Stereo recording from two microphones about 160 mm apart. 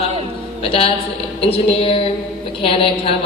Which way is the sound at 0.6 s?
35° left (ahead or behind).